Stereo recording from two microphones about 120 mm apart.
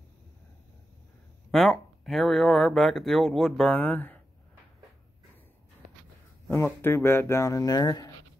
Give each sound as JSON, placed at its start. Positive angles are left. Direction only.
{"t": 1.5, "sound": "speech", "side_deg": 0}
{"t": 3.7, "sound": "speech", "side_deg": 15}
{"t": 6.4, "sound": "speech", "side_deg": 20}